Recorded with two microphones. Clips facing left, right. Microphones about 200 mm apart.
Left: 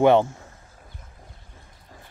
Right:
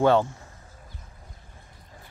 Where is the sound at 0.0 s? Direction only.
20° left (ahead or behind).